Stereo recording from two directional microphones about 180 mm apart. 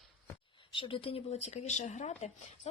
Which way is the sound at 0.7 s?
30° left (ahead or behind).